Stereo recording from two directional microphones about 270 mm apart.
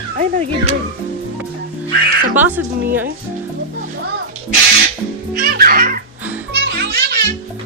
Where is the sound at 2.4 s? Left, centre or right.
Centre.